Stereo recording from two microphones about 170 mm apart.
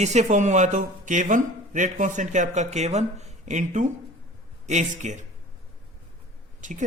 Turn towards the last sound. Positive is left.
turn(degrees=-50)  # may be behind; listen again after turning